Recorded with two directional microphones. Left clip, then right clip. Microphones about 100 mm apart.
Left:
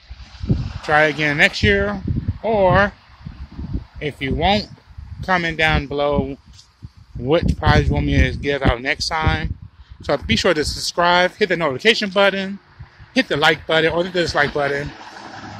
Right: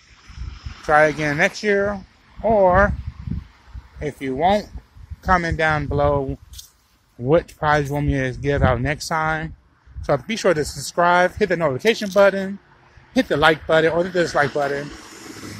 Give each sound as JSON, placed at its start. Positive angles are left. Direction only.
{"t": 0.5, "sound": "a sound", "side_deg": 40}
{"t": 0.8, "sound": "speech", "side_deg": 15}
{"t": 1.9, "sound": "speech", "side_deg": 30}
{"t": 4.2, "sound": "speech", "side_deg": 20}
{"t": 13.3, "sound": "a man's voice", "side_deg": 5}
{"t": 14.4, "sound": "speech", "side_deg": 30}
{"t": 14.9, "sound": "vehicle", "side_deg": 35}